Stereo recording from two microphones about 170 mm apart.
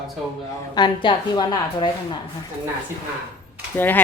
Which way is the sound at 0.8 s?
25° left (ahead or behind).